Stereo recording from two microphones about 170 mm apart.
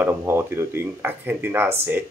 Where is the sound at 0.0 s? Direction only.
10° right (ahead or behind).